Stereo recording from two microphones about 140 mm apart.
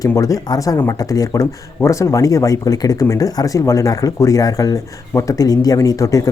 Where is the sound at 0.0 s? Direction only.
25° left (ahead or behind).